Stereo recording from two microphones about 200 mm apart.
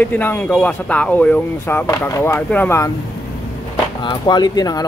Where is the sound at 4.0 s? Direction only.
20° left (ahead or behind).